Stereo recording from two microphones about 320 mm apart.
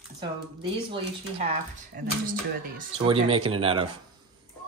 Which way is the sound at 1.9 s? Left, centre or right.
Right.